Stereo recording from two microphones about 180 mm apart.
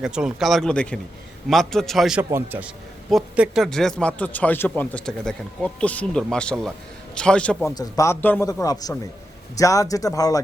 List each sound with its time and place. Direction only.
0.0 s a man's voice: 5° right (ahead or behind)
7.6 s a man's voice: 15° left (ahead or behind)